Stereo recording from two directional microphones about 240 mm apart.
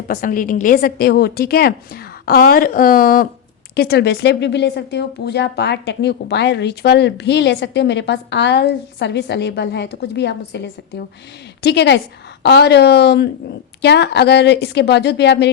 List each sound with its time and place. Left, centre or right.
0.1 s a woman's voice: left